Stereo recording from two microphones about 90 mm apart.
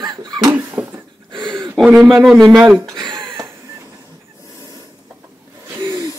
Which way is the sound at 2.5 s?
10° right (ahead or behind).